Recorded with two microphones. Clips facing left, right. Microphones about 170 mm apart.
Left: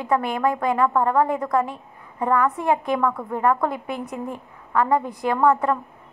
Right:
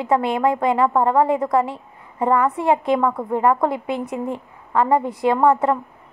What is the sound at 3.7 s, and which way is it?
Speech, 70° right (ahead or behind).